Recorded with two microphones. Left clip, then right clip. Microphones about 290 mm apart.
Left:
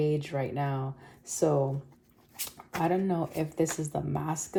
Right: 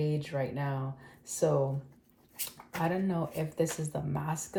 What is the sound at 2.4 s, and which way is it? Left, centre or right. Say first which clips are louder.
Speech: left 3 dB; left.